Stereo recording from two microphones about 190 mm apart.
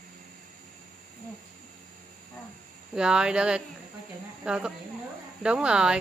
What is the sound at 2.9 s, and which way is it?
Speech, 5° right (ahead or behind).